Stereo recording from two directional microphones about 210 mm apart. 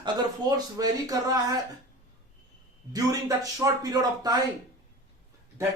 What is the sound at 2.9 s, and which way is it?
Speech, 15° right (ahead or behind).